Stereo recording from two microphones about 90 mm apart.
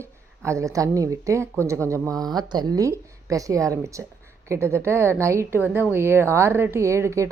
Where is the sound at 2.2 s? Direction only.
50° right (ahead or behind).